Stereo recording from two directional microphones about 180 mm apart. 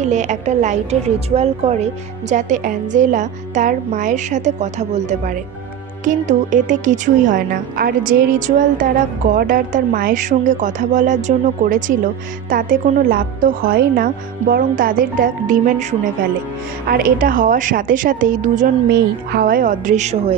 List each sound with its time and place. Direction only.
0.0 s a woman's voice: 40° right (ahead or behind)
18.9 s a woman's voice: 60° right (ahead or behind); by 20.3 s 40° right (ahead or behind)